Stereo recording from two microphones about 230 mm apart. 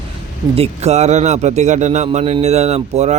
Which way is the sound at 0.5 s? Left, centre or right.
Right.